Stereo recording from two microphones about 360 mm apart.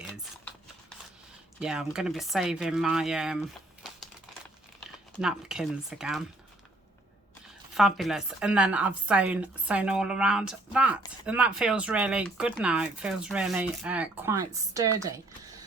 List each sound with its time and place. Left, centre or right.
0.0 s a sound: centre
1.5 s speech: centre
5.2 s speech: centre
7.8 s speech: centre